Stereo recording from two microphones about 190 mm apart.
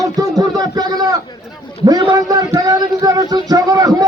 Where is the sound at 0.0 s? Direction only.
20° right (ahead or behind).